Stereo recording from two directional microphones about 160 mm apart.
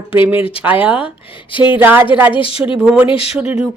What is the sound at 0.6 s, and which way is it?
Speech, 10° right (ahead or behind).